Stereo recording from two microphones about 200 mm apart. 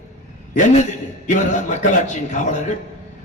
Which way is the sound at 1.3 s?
40° left (ahead or behind).